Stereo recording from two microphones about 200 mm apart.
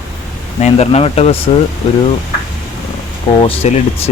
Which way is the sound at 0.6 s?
30° left (ahead or behind).